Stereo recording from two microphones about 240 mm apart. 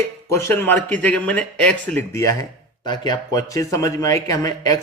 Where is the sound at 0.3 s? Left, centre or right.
Centre.